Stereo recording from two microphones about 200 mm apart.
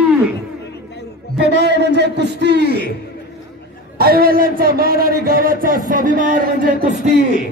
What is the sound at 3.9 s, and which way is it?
Speech, 50° right (ahead or behind).